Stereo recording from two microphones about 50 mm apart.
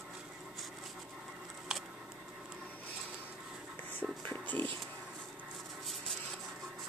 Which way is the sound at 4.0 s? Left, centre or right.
Left.